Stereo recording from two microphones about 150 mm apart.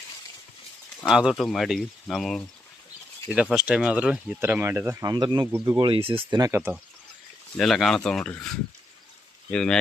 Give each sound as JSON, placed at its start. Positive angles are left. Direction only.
{"t": 1.0, "sound": "speech", "side_deg": -5}
{"t": 3.5, "sound": "speech", "side_deg": -5}
{"t": 4.4, "sound": "speech", "side_deg": -15}
{"t": 5.5, "sound": "speech", "side_deg": -20}
{"t": 5.7, "sound": "speech", "side_deg": -35}
{"t": 6.4, "sound": "speech", "side_deg": -15}
{"t": 7.5, "sound": "speech", "side_deg": 0}
{"t": 9.5, "sound": "speech", "side_deg": 5}